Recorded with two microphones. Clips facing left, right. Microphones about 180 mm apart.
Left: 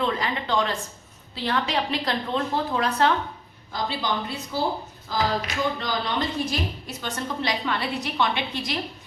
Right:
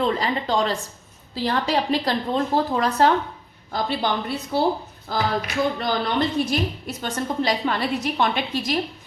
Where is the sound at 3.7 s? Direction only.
55° right (ahead or behind).